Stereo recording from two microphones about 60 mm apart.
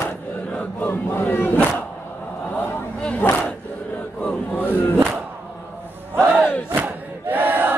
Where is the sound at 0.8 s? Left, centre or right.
Left.